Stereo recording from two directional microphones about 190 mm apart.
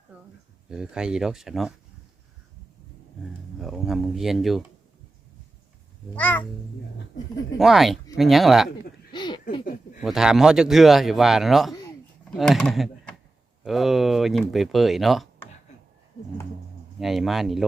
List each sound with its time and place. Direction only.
0.7 s speech: 5° right (ahead or behind)
3.6 s speech: centre (ahead or behind)
6.1 s speech: 10° left (ahead or behind)
7.6 s speech: centre (ahead or behind)
9.1 s a sound: 25° left (ahead or behind)
10.0 s speech: centre (ahead or behind)
11.7 s a sound: 20° left (ahead or behind)
12.3 s speech: centre (ahead or behind)
17.0 s speech: centre (ahead or behind)